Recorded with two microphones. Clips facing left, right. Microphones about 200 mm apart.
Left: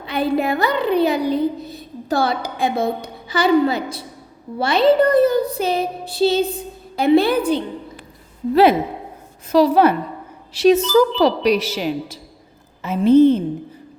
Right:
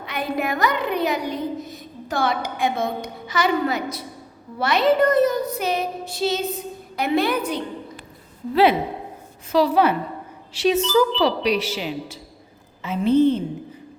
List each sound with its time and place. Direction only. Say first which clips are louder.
0.0 s a woman's voice: left 6 dB; 30° left (ahead or behind)
9.5 s a woman's voice: left 4 dB; 40° left (ahead or behind)